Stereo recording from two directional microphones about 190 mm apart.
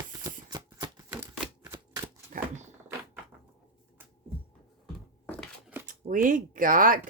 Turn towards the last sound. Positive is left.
turn(degrees=-45)  # may be behind; listen again after turning